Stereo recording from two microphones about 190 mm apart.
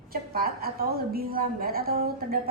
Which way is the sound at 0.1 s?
50° right (ahead or behind).